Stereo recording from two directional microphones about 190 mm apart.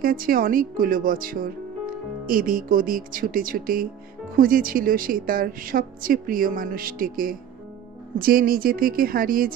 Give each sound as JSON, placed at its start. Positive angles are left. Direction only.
{"t": 0.0, "sound": "a woman's voice", "side_deg": -50}